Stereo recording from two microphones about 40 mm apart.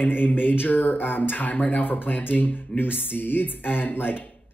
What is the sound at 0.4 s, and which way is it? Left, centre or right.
A man's voice, left.